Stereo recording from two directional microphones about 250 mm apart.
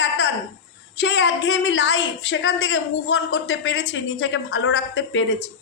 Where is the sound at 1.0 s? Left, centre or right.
Left.